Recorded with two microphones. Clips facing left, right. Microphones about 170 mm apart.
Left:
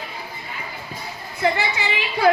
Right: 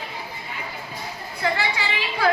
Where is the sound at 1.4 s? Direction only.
20° left (ahead or behind).